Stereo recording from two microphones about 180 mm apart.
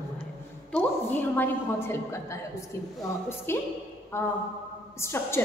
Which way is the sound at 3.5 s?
15° left (ahead or behind).